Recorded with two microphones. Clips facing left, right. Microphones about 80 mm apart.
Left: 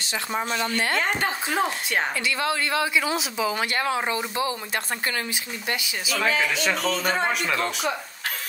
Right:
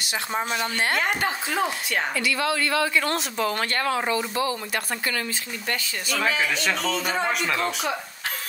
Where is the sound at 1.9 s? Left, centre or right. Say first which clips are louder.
Even; left.